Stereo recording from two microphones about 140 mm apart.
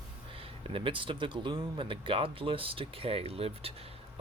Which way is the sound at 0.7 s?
40° right (ahead or behind).